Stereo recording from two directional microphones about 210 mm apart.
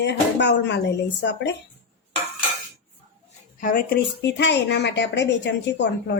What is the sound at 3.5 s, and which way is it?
Speech, 40° left (ahead or behind).